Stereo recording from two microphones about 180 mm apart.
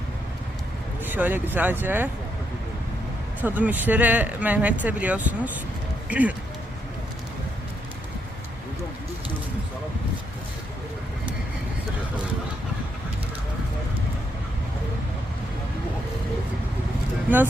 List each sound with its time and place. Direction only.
1.0 s speech: 10° right (ahead or behind)
3.4 s speech: 10° right (ahead or behind)
17.3 s speech: 10° right (ahead or behind)